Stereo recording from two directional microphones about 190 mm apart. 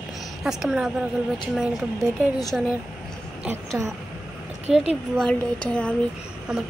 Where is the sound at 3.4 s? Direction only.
15° right (ahead or behind).